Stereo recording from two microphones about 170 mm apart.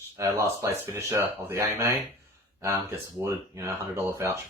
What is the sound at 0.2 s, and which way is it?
Speech, 15° right (ahead or behind).